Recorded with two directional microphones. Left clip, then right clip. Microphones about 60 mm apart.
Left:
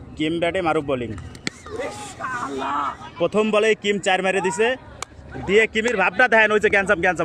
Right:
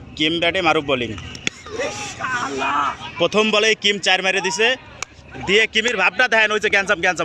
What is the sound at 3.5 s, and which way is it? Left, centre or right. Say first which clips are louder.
Speech: right 2 dB; centre.